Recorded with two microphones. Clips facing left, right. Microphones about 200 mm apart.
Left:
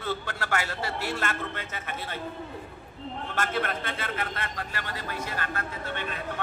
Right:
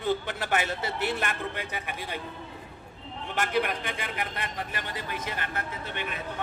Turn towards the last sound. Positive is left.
turn(degrees=-15)  # may be behind; listen again after turning